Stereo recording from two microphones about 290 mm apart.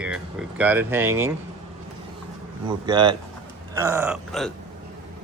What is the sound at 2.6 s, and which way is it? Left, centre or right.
Speech, centre.